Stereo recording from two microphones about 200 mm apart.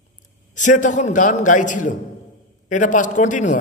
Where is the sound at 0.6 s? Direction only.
40° left (ahead or behind).